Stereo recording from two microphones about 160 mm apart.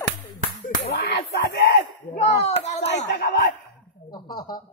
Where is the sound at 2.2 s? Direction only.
45° left (ahead or behind).